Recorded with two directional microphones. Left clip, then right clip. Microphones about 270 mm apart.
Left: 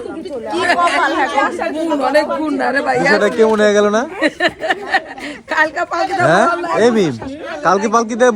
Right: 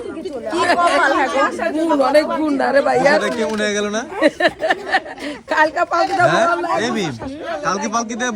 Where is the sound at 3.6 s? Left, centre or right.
Centre.